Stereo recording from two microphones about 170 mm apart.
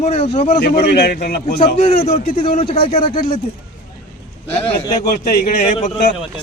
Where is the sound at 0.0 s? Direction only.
35° left (ahead or behind).